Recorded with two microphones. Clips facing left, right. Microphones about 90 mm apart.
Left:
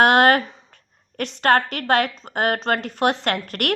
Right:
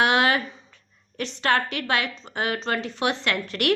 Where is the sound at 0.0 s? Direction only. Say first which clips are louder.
Left 6 dB; 50° left (ahead or behind).